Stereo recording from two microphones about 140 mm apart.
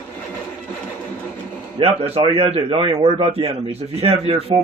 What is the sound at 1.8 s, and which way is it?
A man's voice, 40° right (ahead or behind).